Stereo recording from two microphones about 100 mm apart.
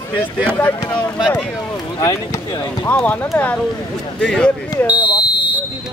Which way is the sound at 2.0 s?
35° left (ahead or behind).